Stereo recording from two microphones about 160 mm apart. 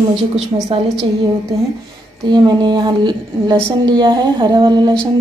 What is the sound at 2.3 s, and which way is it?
A woman's voice, 30° right (ahead or behind).